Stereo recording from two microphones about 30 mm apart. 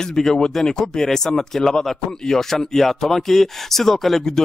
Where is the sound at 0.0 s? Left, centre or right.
Centre.